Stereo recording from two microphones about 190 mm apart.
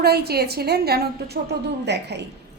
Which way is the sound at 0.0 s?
55° right (ahead or behind).